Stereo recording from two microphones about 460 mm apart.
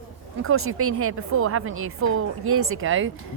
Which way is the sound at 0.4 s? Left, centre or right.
Right.